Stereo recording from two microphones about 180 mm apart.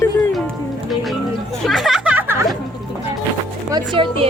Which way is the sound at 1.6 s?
Centre (ahead or behind).